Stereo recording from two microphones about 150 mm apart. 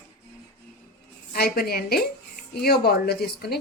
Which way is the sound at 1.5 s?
90° left.